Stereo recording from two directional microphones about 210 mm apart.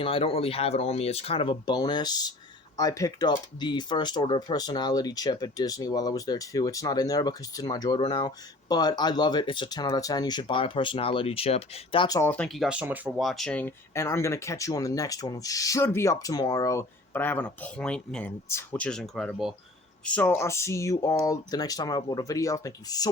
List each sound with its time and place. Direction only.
0.0 s speech: 25° left (ahead or behind)